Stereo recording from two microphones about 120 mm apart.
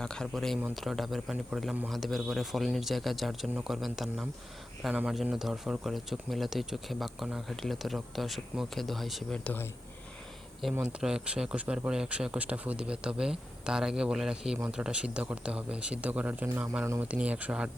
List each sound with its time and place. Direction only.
0.0 s speech: 5° left (ahead or behind)
9.4 s speech: 15° left (ahead or behind)
10.8 s speech: 5° right (ahead or behind)